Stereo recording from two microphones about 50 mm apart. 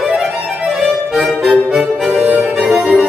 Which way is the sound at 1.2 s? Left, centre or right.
Centre.